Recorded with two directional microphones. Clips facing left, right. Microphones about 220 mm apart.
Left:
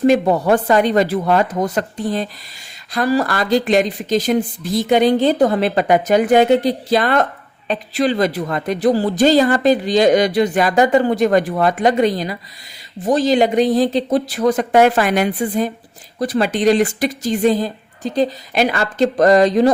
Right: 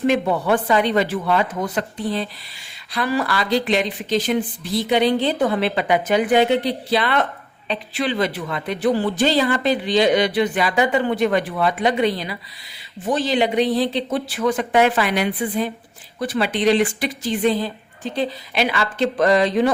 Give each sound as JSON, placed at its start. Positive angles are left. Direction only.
{"t": 0.0, "sound": "speech", "side_deg": 40}